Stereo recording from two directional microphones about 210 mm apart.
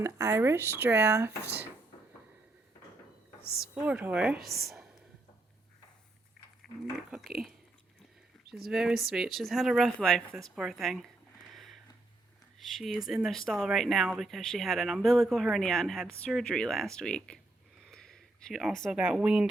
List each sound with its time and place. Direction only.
0.0 s speech: 15° right (ahead or behind)
3.6 s speech: 5° right (ahead or behind)
4.4 s speech: 45° right (ahead or behind)
4.6 s whispering: centre (ahead or behind)
8.4 s speech: centre (ahead or behind)
11.5 s a sound: centre (ahead or behind)
12.5 s speech: centre (ahead or behind)